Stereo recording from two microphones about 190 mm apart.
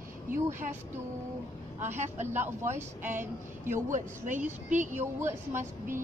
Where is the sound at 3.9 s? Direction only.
40° right (ahead or behind).